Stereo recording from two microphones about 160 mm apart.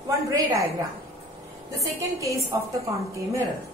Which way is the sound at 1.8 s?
20° right (ahead or behind).